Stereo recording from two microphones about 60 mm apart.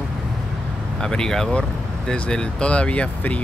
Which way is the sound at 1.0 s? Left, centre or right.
Centre.